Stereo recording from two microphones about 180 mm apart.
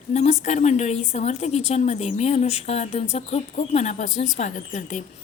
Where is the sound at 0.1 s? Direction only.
40° left (ahead or behind).